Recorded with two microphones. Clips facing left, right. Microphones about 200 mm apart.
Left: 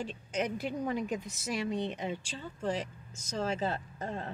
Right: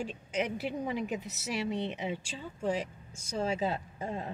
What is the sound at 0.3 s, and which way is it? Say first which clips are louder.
Speech: even; 5° right (ahead or behind).